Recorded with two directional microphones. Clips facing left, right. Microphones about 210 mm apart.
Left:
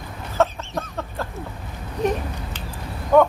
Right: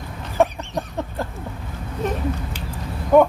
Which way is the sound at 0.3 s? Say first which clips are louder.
Right 2 dB; 15° right (ahead or behind).